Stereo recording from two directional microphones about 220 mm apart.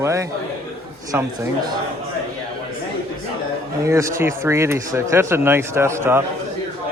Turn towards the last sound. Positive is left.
turn(degrees=-10)  # may be behind; listen again after turning